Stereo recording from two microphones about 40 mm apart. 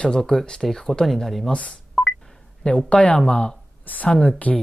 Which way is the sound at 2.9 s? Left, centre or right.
Left.